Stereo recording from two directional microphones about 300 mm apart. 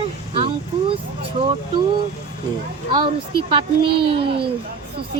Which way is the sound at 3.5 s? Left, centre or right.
Centre.